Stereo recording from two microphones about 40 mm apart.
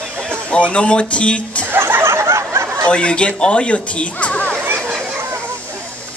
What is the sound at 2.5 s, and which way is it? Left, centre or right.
Snicker, right.